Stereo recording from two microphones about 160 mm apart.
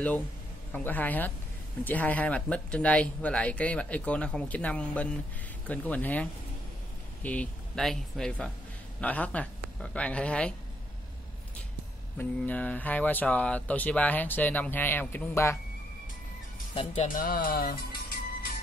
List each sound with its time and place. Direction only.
0.7 s speech: 10° left (ahead or behind)
7.2 s speech: 5° left (ahead or behind)
12.2 s speech: 10° left (ahead or behind)
16.7 s speech: 45° left (ahead or behind); by 18.2 s 70° left (ahead or behind)